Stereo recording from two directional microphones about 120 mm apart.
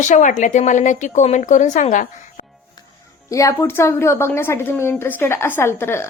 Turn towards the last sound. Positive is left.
turn(degrees=20)  # may be behind; listen again after turning